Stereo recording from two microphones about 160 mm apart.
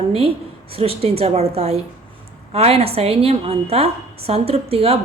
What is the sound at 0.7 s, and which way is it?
A woman's voice, 35° right (ahead or behind).